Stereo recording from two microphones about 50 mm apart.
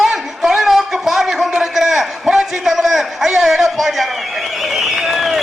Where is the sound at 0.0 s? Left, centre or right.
Centre.